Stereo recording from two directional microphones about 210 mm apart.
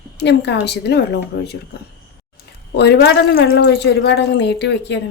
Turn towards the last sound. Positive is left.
turn(degrees=55)  # may be behind; listen again after turning